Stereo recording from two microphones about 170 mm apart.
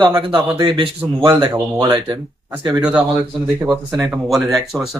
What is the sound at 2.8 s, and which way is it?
Speech, 5° right (ahead or behind).